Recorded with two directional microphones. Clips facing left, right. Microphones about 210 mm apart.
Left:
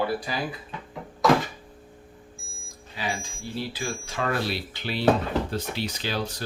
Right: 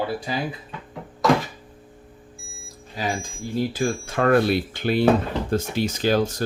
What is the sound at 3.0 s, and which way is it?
Speech, 45° right (ahead or behind).